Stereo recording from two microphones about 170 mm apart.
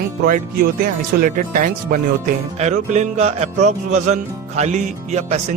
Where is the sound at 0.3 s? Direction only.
55° right (ahead or behind).